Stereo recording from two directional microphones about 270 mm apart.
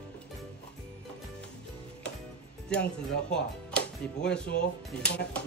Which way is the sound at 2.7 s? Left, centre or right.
Centre.